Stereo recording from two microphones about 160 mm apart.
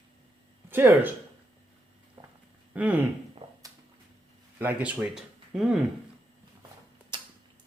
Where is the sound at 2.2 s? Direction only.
30° right (ahead or behind).